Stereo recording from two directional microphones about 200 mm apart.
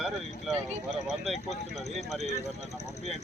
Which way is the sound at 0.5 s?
Centre (ahead or behind).